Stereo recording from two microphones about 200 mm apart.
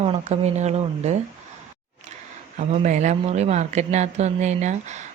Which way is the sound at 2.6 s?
35° right (ahead or behind).